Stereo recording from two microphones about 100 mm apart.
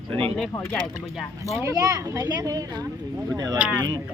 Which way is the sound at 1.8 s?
35° right (ahead or behind).